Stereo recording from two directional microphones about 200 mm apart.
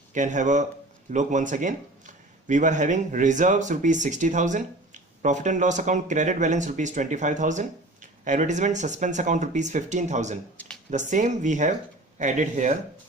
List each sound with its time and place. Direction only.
0.1 s speech: 40° right (ahead or behind)